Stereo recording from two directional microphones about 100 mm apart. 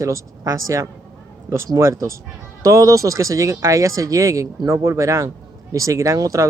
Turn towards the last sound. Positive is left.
turn(degrees=-35)  # may be behind; listen again after turning